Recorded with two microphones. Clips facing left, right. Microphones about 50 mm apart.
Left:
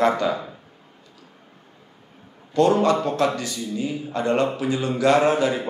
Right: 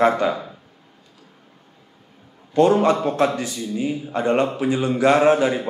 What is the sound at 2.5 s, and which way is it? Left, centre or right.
A man's voice, centre.